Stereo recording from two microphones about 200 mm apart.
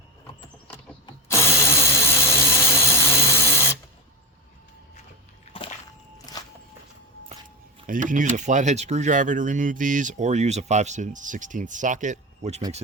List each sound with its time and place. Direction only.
1.0 s drill: 15° left (ahead or behind)
5.5 s a sound: 30° left (ahead or behind)
6.3 s walk: 20° left (ahead or behind)
7.9 s speech: 40° right (ahead or behind)